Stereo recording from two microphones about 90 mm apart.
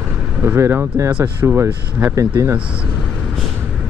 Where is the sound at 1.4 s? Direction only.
30° right (ahead or behind).